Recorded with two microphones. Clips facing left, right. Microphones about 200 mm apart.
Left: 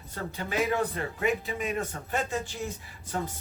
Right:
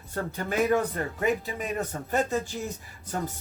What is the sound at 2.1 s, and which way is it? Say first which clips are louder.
Speech: right 5 dB; 40° right (ahead or behind).